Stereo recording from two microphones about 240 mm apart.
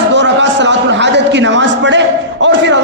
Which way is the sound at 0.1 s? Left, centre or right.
Right.